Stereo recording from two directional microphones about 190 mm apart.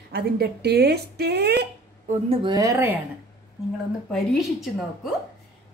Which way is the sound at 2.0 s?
25° right (ahead or behind).